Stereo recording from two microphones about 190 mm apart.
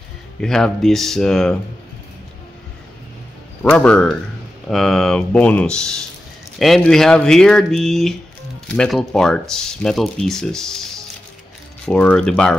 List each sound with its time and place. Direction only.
0.4 s speech: 5° left (ahead or behind)
3.6 s speech: 5° left (ahead or behind)
11.8 s speech: 10° left (ahead or behind)